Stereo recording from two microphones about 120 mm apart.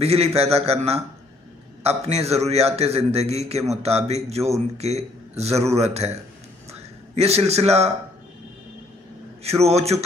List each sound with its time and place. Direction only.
0.0 s a man's voice: 60° right (ahead or behind)
6.7 s a sound: 60° right (ahead or behind)
9.6 s a man's voice: 60° right (ahead or behind)